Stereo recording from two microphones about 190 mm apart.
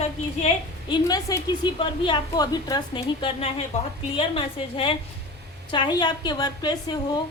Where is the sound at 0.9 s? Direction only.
20° left (ahead or behind).